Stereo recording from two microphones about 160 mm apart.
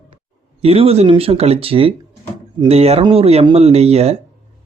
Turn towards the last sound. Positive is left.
turn(degrees=-40)  # may be behind; listen again after turning